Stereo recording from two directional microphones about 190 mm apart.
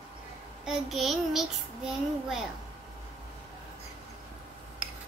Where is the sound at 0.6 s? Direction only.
Centre (ahead or behind).